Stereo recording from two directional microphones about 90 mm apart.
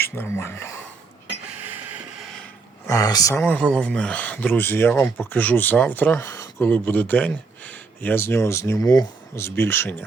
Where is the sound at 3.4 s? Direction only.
10° left (ahead or behind); by 9.1 s 40° left (ahead or behind).